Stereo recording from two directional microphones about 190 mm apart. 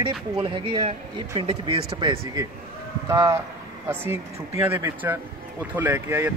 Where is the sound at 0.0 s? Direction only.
25° right (ahead or behind).